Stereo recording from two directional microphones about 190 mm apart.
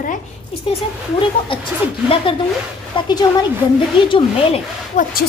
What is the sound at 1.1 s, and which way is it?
Speech, 25° left (ahead or behind).